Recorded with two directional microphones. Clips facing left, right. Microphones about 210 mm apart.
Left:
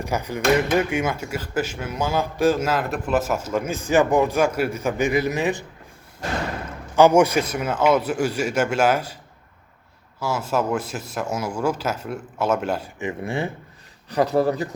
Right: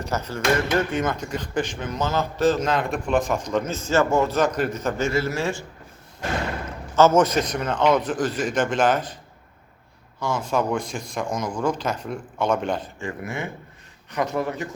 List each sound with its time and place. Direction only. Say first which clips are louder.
0.0 s speech: left 2 dB; 10° left (ahead or behind)
6.9 s speech: left 2 dB; 15° left (ahead or behind)
10.2 s speech: even; 5° left (ahead or behind)
13.0 s a man's voice: left 4 dB; 25° left (ahead or behind)